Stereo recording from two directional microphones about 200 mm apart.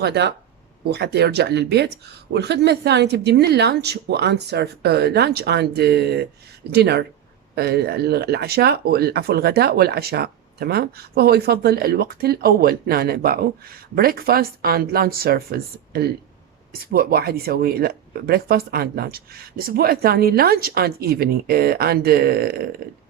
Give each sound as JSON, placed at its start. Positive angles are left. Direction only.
{"t": 0.0, "sound": "speech", "side_deg": -55}